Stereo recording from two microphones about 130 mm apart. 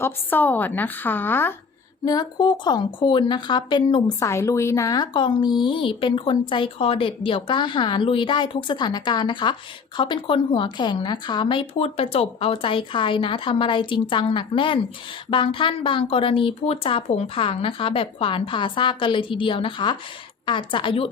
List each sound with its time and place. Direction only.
0.0 s a woman's voice: 15° left (ahead or behind)
2.0 s a woman's voice: 35° left (ahead or behind)
4.2 s a woman's voice: 20° left (ahead or behind); by 21.1 s 45° left (ahead or behind)